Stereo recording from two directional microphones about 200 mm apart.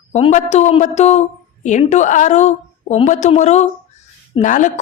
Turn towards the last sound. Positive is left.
turn(degrees=40)  # may be behind; listen again after turning